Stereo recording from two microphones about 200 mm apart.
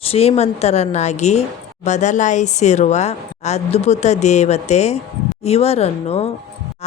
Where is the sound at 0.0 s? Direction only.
30° left (ahead or behind).